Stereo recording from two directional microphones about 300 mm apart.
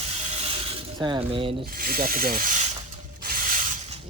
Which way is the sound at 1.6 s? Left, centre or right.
Right.